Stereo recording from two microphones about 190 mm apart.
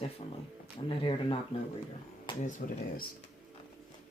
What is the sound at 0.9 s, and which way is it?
Speech, 25° left (ahead or behind).